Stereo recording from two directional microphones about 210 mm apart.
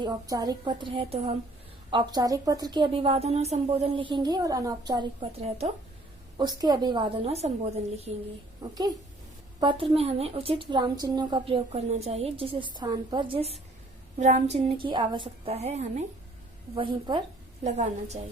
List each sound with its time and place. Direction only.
0.0 s a woman's voice: 20° right (ahead or behind)
8.6 s a woman's voice: 20° right (ahead or behind); by 18.2 s 35° right (ahead or behind)